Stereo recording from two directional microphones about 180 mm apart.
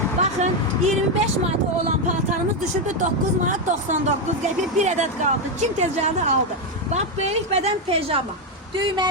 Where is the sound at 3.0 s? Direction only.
45° right (ahead or behind).